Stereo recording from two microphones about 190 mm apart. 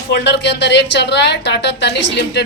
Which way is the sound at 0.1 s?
65° left (ahead or behind).